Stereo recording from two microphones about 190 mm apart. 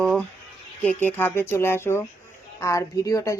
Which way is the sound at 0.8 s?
10° left (ahead or behind).